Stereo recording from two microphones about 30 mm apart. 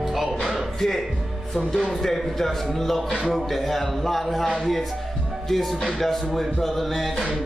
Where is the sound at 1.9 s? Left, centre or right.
Centre.